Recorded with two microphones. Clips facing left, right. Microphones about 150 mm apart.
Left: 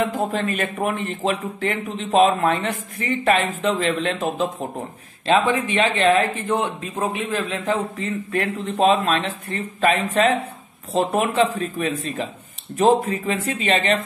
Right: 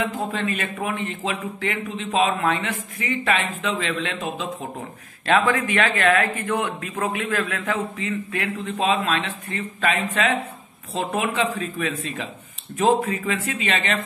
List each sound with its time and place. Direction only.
0.0 s speech: 40° left (ahead or behind)
5.2 s speech: 20° left (ahead or behind)
8.3 s speech: 40° left (ahead or behind)